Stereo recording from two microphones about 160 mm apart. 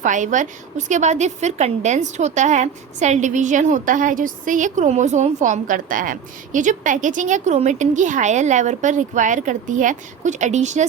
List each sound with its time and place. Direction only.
0.0 s a woman's voice: 50° right (ahead or behind)